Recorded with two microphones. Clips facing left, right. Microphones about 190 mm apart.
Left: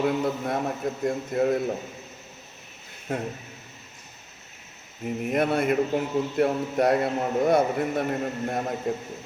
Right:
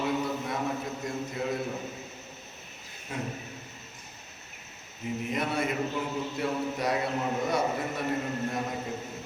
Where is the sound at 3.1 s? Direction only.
50° left (ahead or behind).